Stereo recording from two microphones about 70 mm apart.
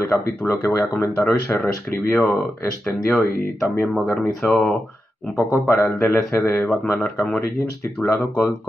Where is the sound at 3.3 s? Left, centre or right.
Left.